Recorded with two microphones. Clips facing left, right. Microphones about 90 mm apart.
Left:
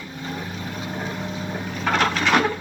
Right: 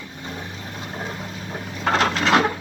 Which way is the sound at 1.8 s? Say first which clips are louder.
Right 1 dB; 30° right (ahead or behind).